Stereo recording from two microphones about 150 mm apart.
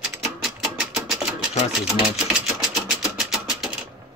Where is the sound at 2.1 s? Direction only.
5° right (ahead or behind).